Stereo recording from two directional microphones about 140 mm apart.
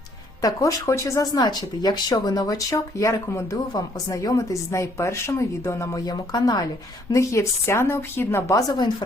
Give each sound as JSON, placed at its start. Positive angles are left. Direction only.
{"t": 0.4, "sound": "speech", "side_deg": 20}